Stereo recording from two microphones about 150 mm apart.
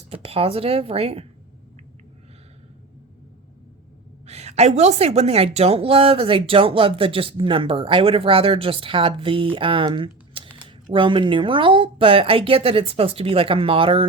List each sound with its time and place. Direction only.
0.1 s a woman's voice: 40° right (ahead or behind)
4.3 s a woman's voice: 45° right (ahead or behind)